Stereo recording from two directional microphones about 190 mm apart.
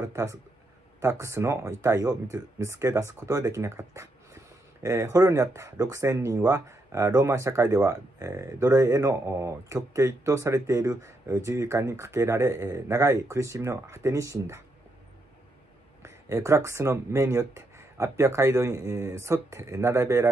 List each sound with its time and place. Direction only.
0.0 s speech: 15° right (ahead or behind)
16.0 s speech: 15° right (ahead or behind)